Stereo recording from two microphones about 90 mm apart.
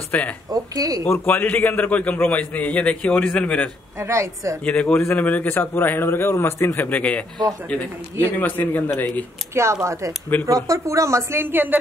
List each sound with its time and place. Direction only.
0.1 s a man's voice: 15° left (ahead or behind)
0.5 s speech: 45° right (ahead or behind)
1.0 s a man's voice: 25° left (ahead or behind)
4.0 s speech: 30° right (ahead or behind)
4.6 s a man's voice: 15° left (ahead or behind)
9.5 s speech: 30° right (ahead or behind)